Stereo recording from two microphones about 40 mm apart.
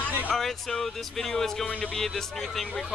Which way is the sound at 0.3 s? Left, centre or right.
Centre.